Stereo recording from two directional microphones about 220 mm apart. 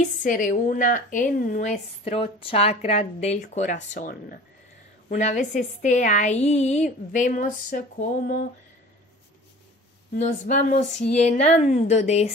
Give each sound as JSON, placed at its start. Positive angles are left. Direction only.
{"t": 0.2, "sound": "a woman's voice", "side_deg": 35}
{"t": 10.1, "sound": "a woman's voice", "side_deg": 30}